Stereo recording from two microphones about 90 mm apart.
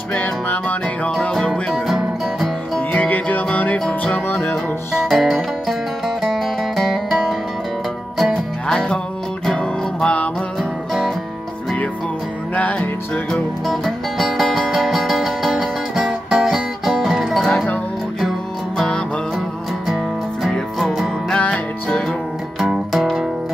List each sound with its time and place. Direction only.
0.1 s music: 20° left (ahead or behind)
1.1 s music: 10° left (ahead or behind)
5.0 s music: centre (ahead or behind)
10.9 s music: centre (ahead or behind)
12.5 s music: 15° left (ahead or behind)
13.7 s music: centre (ahead or behind)
17.5 s music: 15° left (ahead or behind)
18.8 s music: 10° left (ahead or behind)
20.4 s music: centre (ahead or behind)
21.4 s music: 15° left (ahead or behind)
22.6 s music: centre (ahead or behind)